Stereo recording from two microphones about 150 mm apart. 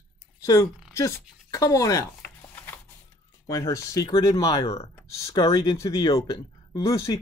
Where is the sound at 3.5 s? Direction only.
20° left (ahead or behind).